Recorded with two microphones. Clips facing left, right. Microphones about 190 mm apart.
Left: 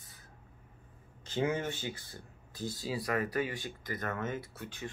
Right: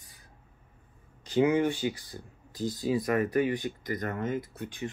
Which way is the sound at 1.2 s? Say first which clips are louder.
Right 8 dB; 15° right (ahead or behind).